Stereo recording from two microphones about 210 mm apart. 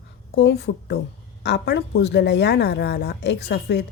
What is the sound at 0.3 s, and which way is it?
Speech, 55° left (ahead or behind).